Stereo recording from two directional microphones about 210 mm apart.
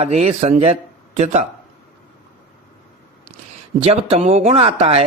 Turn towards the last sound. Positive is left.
turn(degrees=-30)  # may be behind; listen again after turning